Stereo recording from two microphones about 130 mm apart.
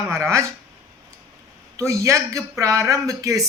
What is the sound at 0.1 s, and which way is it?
Speech, 20° right (ahead or behind).